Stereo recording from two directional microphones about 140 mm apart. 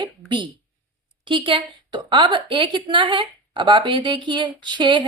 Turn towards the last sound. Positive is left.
turn(degrees=-35)  # may be behind; listen again after turning